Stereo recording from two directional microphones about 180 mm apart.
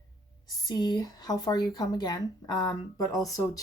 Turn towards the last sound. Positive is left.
turn(degrees=20)  # may be behind; listen again after turning